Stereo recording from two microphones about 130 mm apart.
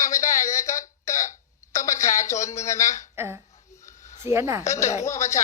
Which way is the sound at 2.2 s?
25° left (ahead or behind).